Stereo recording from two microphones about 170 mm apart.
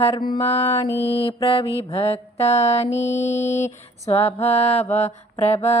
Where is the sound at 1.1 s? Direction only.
35° left (ahead or behind).